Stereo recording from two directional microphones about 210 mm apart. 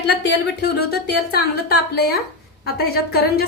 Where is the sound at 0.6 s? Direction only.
50° left (ahead or behind).